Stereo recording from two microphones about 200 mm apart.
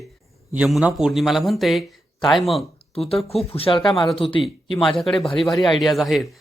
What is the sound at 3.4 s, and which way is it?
Speech, 30° left (ahead or behind).